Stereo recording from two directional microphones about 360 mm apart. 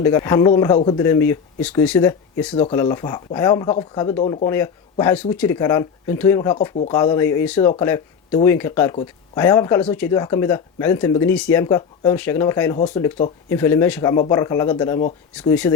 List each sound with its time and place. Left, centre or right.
0.0 s speech: centre